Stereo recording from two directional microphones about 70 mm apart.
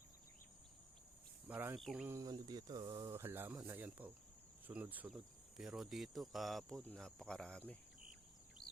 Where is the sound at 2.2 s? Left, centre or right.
Right.